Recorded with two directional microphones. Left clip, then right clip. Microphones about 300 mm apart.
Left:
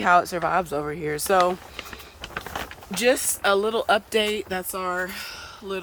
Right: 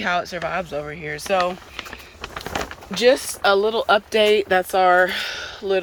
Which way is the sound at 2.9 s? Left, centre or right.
Centre.